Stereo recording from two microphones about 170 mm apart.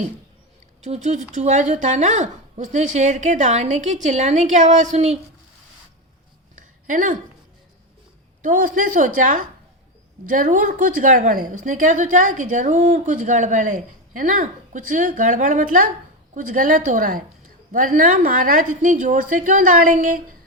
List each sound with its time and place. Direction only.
0.8 s a woman's voice: 45° right (ahead or behind)
6.6 s a sound: 50° right (ahead or behind)
8.4 s a woman's voice: 50° right (ahead or behind)